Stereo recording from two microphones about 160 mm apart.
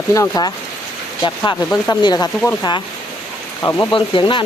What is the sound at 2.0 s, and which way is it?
Speech, 25° left (ahead or behind).